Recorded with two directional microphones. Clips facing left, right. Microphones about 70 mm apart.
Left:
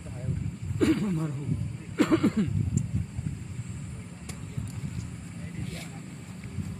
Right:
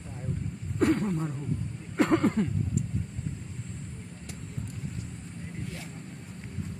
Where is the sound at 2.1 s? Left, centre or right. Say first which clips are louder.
Even; centre.